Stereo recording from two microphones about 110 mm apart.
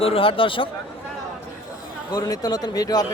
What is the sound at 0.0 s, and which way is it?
Speech, 60° left (ahead or behind).